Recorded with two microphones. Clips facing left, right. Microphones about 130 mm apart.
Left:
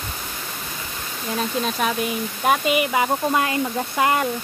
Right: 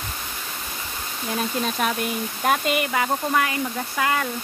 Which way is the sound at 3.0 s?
25° left (ahead or behind).